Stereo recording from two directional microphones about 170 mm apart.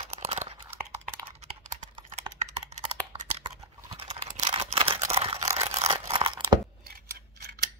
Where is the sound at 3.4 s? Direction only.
35° right (ahead or behind).